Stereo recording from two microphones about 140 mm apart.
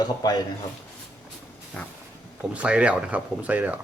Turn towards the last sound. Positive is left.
turn(degrees=-10)  # may be behind; listen again after turning